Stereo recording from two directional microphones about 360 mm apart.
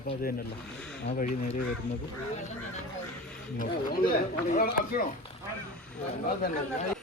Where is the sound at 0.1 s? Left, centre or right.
Left.